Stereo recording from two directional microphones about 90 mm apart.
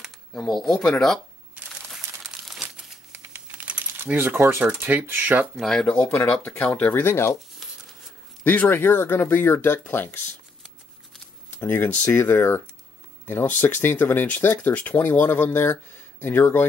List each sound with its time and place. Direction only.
0.3 s speech: 5° left (ahead or behind)
2.4 s crumpling: 5° right (ahead or behind)
3.1 s typing: 25° right (ahead or behind)
3.6 s speech: 20° right (ahead or behind)
5.6 s speech: 5° left (ahead or behind)
6.0 s speech: 30° left (ahead or behind)
6.4 s speech: 20° left (ahead or behind)
8.5 s speech: 20° left (ahead or behind)
11.6 s speech: 25° left (ahead or behind)